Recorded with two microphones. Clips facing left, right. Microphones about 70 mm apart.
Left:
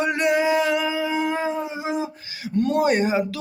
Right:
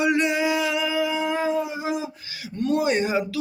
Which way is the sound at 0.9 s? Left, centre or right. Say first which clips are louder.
Even; left.